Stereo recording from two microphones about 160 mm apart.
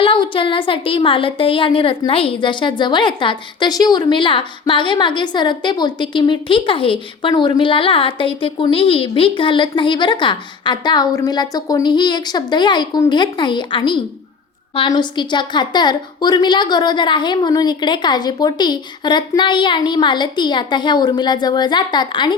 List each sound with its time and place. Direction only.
0.0 s a woman's voice: 35° left (ahead or behind)